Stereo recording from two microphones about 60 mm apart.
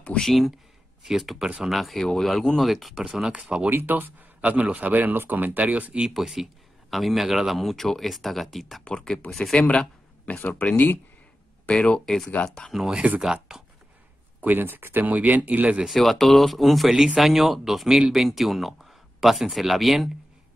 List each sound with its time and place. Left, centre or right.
0.2 s speech: centre
3.7 s speech: right
6.0 s speech: centre
8.8 s speech: centre
11.6 s speech: centre
12.9 s speech: right
13.2 s speech: centre
14.4 s speech: right
15.9 s speech: centre